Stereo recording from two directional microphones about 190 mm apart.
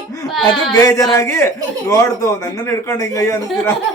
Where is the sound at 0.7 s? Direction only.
15° left (ahead or behind).